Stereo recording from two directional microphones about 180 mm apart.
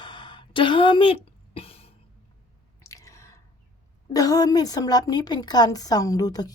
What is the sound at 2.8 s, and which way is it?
Drip, 15° left (ahead or behind).